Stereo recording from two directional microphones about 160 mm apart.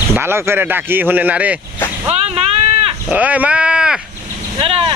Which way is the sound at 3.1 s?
10° right (ahead or behind).